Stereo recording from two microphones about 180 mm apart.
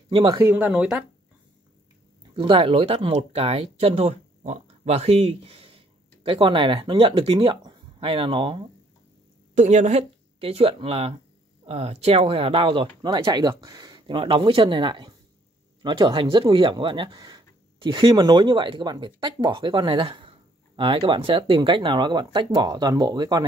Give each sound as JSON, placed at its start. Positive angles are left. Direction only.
{"t": 0.1, "sound": "speech", "side_deg": -25}
{"t": 0.4, "sound": "speech", "side_deg": -10}
{"t": 2.3, "sound": "speech", "side_deg": -30}
{"t": 9.6, "sound": "speech", "side_deg": -40}